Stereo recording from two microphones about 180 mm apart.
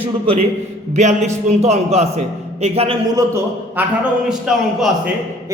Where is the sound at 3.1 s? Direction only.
15° right (ahead or behind).